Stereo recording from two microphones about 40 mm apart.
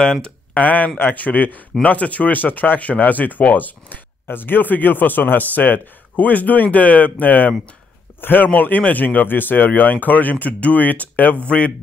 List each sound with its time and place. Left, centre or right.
0.0 s speech: centre
0.6 s speech: left
4.3 s speech: left
8.2 s speech: left
8.5 s speech: left
9.7 s speech: left
11.4 s speech: left